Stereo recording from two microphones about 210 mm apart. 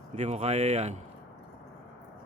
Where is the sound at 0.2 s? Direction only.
30° right (ahead or behind).